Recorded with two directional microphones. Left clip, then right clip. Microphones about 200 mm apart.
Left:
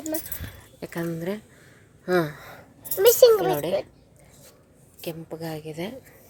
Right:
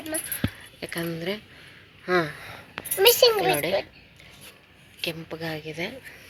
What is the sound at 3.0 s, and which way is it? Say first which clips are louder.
Speech: left 2 dB; 70° left (ahead or behind).